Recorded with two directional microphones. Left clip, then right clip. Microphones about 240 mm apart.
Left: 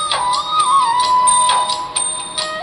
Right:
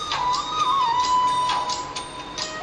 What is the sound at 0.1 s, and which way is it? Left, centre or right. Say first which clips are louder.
Music: left 4 dB; left.